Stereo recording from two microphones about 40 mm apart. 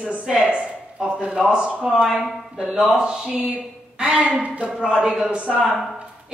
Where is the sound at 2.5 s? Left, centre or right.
Centre.